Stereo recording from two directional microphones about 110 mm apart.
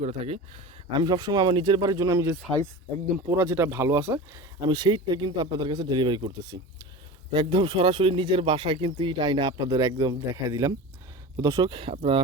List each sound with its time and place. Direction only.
0.2 s speech: 65° right (ahead or behind)
0.9 s speech: 40° right (ahead or behind)
4.6 s speech: 40° right (ahead or behind)
11.7 s speech: 55° right (ahead or behind)